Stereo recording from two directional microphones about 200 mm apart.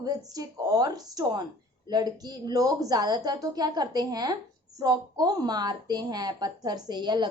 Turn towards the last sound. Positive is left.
turn(degrees=-20)  # may be behind; listen again after turning